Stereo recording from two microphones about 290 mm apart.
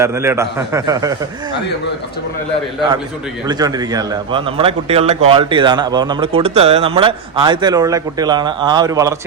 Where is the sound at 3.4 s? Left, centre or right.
Centre.